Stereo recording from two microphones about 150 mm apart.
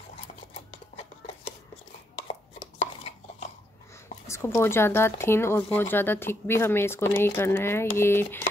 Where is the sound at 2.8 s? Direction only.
45° left (ahead or behind).